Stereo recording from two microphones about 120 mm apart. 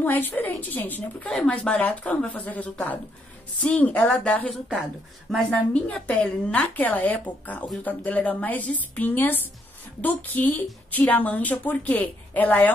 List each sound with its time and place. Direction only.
0.0 s a woman's voice: 15° left (ahead or behind)